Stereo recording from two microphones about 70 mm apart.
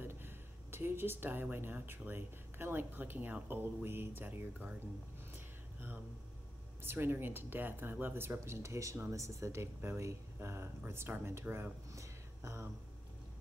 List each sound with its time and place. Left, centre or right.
0.0 s speech: right
6.8 s speech: right
11.9 s a sound: right